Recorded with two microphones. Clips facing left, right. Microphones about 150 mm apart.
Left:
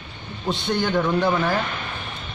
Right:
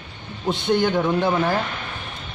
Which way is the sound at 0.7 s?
15° right (ahead or behind).